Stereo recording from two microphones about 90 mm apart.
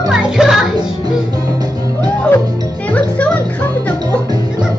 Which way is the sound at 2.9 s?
15° left (ahead or behind).